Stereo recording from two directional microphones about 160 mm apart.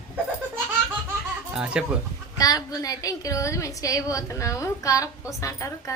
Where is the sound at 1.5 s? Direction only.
5° right (ahead or behind).